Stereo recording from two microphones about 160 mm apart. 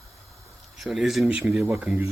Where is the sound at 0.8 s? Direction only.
Centre (ahead or behind).